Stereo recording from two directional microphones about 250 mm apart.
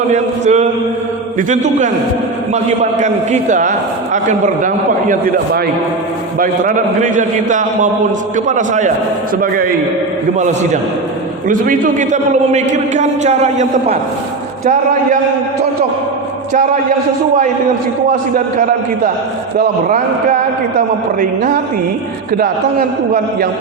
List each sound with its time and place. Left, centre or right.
0.1 s a man's voice: right
6.4 s a man's voice: right
10.3 s a man's voice: right
19.5 s a man's voice: right